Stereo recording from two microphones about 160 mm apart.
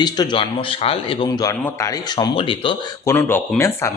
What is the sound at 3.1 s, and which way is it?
Speech, 15° left (ahead or behind).